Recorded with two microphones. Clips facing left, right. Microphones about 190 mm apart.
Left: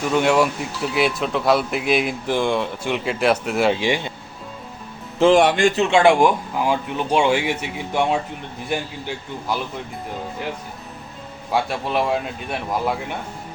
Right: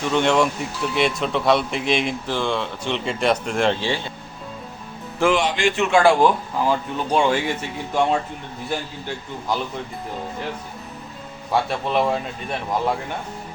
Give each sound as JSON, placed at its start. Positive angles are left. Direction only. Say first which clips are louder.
{"t": 0.0, "sound": "speech", "louder": "left 1 dB", "side_deg": 5}
{"t": 5.4, "sound": "a man's voice", "louder": "left 5 dB", "side_deg": 55}
{"t": 5.7, "sound": "speech", "louder": "left 1 dB", "side_deg": 30}
{"t": 11.5, "sound": "speech", "louder": "right 1 dB", "side_deg": 5}